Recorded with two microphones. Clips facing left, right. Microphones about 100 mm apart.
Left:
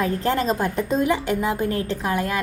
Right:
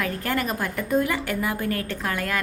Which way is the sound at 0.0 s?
25° left (ahead or behind).